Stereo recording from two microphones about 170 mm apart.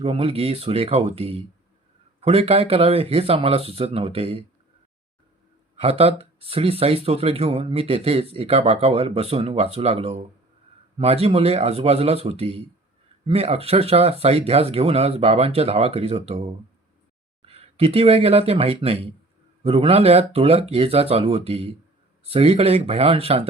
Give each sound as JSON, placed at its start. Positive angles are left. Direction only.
{"t": 0.0, "sound": "speech", "side_deg": -35}
{"t": 5.7, "sound": "speech", "side_deg": -35}
{"t": 17.4, "sound": "speech", "side_deg": -35}